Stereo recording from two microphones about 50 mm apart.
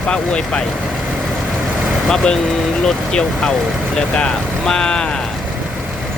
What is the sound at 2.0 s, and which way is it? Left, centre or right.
Speech, centre.